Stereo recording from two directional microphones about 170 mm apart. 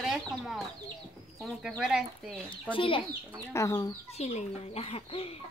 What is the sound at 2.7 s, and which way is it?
Speech, 30° left (ahead or behind).